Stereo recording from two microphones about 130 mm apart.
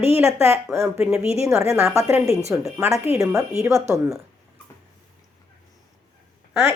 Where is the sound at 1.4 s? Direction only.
20° right (ahead or behind).